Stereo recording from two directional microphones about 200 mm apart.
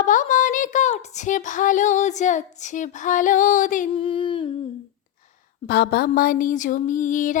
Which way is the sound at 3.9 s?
25° left (ahead or behind).